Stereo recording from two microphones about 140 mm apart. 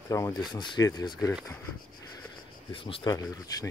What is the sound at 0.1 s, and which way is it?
Speech, 25° left (ahead or behind).